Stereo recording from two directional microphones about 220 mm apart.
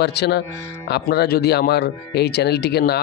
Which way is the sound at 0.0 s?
50° left (ahead or behind).